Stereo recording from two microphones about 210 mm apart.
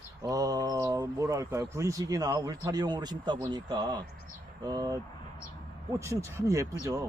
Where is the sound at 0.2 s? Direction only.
15° right (ahead or behind).